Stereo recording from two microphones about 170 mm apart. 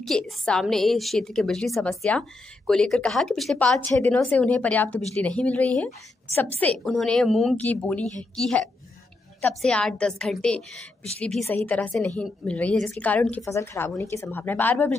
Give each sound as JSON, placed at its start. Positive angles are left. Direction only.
{"t": 0.0, "sound": "a woman's voice", "side_deg": 5}